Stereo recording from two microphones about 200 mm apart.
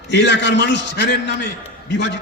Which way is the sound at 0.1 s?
60° left (ahead or behind).